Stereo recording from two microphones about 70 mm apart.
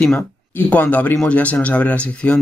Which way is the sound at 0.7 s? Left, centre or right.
Left.